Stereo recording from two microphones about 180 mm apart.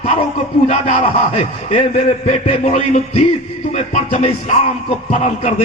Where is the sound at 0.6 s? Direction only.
35° left (ahead or behind).